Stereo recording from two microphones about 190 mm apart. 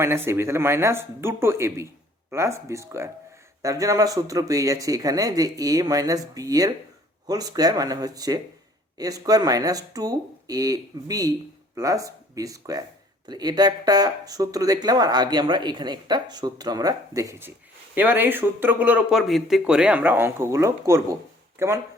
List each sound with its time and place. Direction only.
0.0 s speech: 15° right (ahead or behind)